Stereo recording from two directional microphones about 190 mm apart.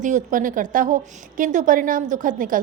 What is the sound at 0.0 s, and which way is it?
A woman's voice, 45° right (ahead or behind).